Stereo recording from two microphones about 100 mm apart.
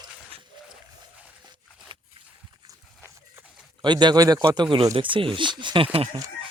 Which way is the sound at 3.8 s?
45° right (ahead or behind).